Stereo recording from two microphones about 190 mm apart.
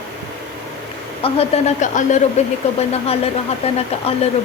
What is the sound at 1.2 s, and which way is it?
Speech, 35° left (ahead or behind).